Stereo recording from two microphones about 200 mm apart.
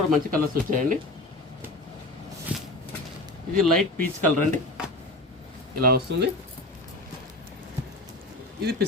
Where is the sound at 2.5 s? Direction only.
5° right (ahead or behind).